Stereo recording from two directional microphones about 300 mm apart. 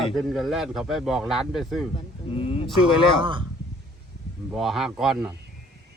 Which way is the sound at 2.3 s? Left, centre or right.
Centre.